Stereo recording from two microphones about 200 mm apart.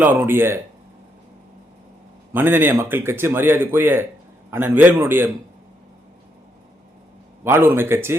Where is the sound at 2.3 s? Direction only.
10° right (ahead or behind).